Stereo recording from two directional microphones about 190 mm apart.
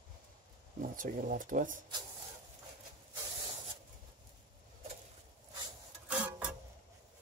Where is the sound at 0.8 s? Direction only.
45° right (ahead or behind).